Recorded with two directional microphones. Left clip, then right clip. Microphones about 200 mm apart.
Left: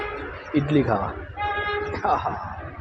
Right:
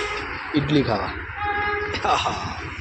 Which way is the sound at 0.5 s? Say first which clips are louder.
Even; 5° left (ahead or behind).